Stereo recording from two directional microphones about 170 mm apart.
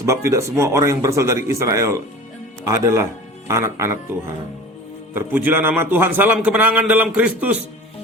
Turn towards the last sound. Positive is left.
turn(degrees=-10)  # may be behind; listen again after turning